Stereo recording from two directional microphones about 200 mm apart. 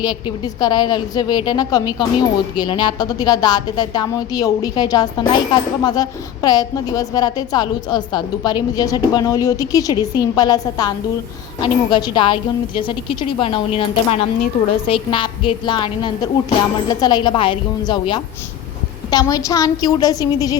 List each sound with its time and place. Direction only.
0.0 s a woman's voice: 20° left (ahead or behind)